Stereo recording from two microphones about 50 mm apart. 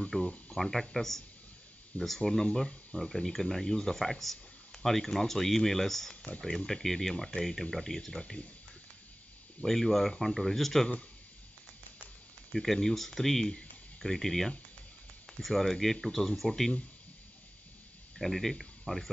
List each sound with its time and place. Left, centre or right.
0.1 s speech: left
0.6 s speech: centre
9.6 s speech: centre
12.5 s speech: centre
18.1 s speech: centre